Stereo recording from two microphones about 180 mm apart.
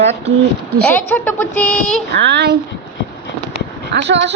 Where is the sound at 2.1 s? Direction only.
65° right (ahead or behind).